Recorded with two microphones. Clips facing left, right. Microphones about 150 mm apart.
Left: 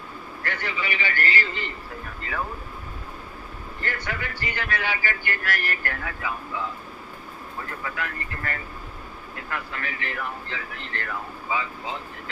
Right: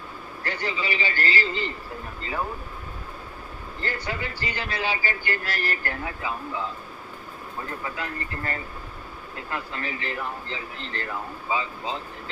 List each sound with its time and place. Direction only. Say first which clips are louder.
0.4 s speech: right 1 dB; 30° right (ahead or behind)
3.8 s speech: right 1 dB; 30° right (ahead or behind)
7.7 s speech: even; 30° right (ahead or behind)